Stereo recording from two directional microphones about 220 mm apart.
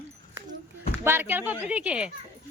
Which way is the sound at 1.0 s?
10° right (ahead or behind).